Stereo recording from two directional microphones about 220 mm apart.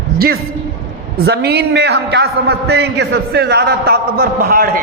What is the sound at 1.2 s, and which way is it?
A man's voice, 50° right (ahead or behind).